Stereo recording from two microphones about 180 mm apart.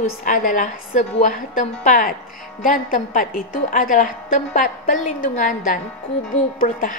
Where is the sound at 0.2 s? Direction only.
50° left (ahead or behind).